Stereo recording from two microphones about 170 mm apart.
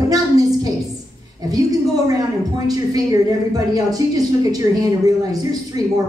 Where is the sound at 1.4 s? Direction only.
20° right (ahead or behind).